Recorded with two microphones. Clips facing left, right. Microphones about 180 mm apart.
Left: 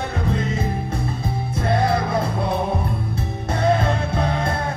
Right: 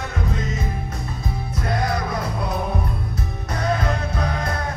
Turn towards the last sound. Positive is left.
turn(degrees=25)  # may be behind; listen again after turning